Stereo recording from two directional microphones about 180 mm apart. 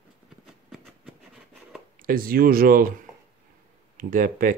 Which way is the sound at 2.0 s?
55° right (ahead or behind).